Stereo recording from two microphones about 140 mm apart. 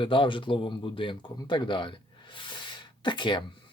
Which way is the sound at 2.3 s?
35° left (ahead or behind).